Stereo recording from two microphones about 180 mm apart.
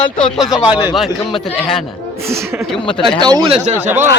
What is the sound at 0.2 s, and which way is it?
Speech, centre (ahead or behind).